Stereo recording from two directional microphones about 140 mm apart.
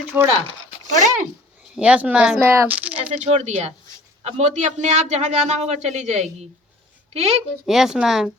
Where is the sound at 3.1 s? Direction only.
50° right (ahead or behind).